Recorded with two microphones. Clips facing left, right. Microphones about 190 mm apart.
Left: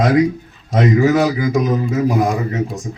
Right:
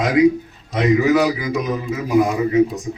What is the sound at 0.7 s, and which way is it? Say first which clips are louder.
A man's voice: left 2 dB; 45° left (ahead or behind).